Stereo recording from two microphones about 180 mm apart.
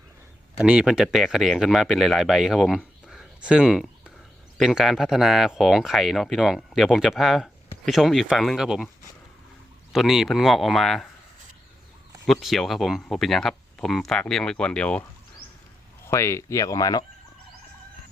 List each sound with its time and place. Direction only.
0.6 s speech: 5° right (ahead or behind)
9.9 s speech: centre (ahead or behind)
12.2 s speech: centre (ahead or behind)
16.0 s speech: 15° left (ahead or behind)